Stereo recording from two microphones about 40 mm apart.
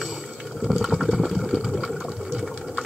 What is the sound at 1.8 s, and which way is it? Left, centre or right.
Sewing machine, centre.